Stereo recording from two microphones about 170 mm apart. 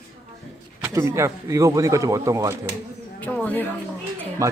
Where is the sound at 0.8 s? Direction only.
15° right (ahead or behind).